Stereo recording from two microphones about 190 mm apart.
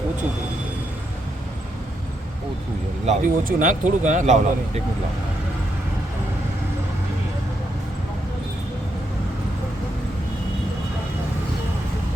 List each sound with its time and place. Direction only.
3.1 s speech: 40° right (ahead or behind)